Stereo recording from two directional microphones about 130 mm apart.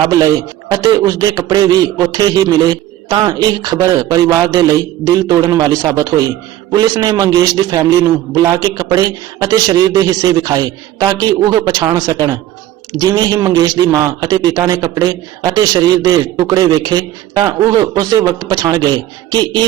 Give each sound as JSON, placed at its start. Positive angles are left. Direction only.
{"t": 0.0, "sound": "a man's voice", "side_deg": -30}